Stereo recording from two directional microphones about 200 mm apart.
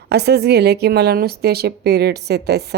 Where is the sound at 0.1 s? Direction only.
55° right (ahead or behind).